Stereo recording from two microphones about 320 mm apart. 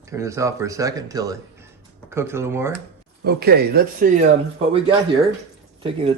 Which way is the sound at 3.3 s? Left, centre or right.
Right.